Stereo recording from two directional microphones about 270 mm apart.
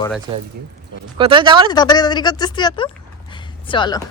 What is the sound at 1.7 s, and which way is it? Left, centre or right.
A woman's voice, centre.